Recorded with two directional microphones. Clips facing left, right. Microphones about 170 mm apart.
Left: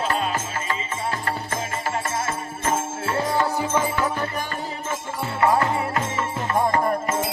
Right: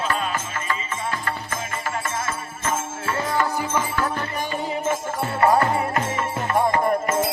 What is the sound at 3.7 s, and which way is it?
Music, 10° left (ahead or behind).